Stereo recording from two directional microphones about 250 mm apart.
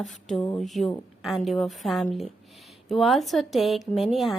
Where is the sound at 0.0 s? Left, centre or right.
Centre.